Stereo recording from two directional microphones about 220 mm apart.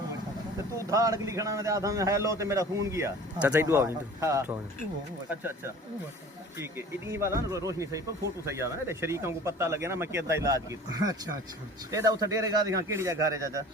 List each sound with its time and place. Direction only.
0.8 s speech: 15° right (ahead or behind)